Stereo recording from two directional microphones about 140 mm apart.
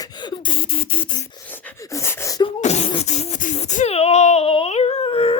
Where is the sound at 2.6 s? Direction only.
50° left (ahead or behind).